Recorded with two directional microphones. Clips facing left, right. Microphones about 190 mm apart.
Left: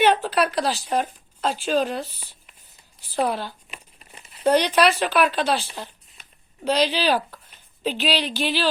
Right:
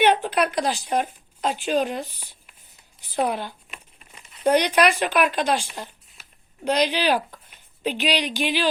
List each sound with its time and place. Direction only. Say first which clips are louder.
0.0 s speech: even; 15° right (ahead or behind)
5.7 s a sound: even; 5° right (ahead or behind)
6.7 s speech: even; 15° right (ahead or behind)